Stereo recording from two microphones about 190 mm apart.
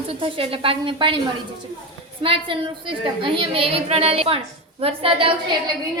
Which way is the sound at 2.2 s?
30° right (ahead or behind).